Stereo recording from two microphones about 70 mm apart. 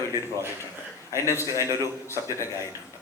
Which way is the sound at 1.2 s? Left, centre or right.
Left.